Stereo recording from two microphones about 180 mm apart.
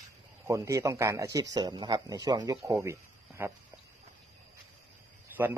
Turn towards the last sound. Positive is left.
turn(degrees=-10)  # may be behind; listen again after turning